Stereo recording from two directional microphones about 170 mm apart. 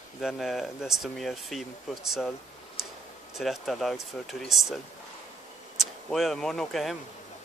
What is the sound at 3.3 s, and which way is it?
Speech, centre (ahead or behind).